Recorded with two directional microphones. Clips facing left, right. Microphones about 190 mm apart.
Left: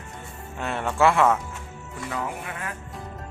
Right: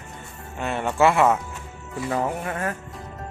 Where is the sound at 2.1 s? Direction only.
45° right (ahead or behind).